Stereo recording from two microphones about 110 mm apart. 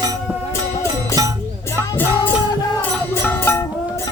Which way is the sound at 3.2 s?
20° left (ahead or behind).